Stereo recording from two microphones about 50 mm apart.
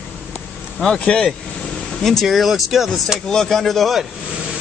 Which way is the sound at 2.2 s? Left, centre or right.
Centre.